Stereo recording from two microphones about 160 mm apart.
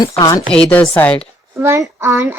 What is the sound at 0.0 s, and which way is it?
Speech, 20° left (ahead or behind).